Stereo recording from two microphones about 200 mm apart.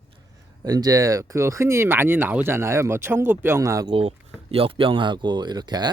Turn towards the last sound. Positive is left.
turn(degrees=-20)  # may be behind; listen again after turning